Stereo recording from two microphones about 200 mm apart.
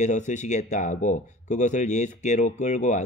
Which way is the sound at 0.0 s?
35° left (ahead or behind).